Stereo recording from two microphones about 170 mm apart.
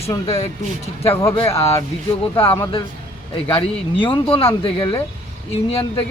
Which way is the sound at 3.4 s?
30° left (ahead or behind).